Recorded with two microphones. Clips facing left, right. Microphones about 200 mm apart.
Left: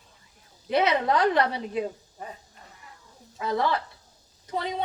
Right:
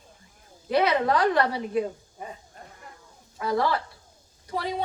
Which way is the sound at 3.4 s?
20° left (ahead or behind).